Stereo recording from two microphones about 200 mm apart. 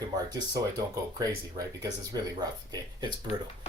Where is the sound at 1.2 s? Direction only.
20° right (ahead or behind).